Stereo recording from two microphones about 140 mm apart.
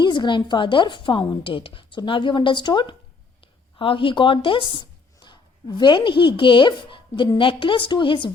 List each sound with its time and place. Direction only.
0.0 s a woman's voice: 35° left (ahead or behind)